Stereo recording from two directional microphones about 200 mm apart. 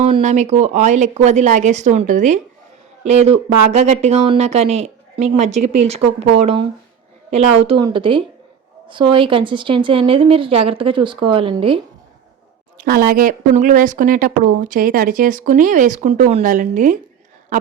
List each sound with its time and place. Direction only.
0.0 s a woman's voice: 35° right (ahead or behind)
12.7 s speech: 45° right (ahead or behind)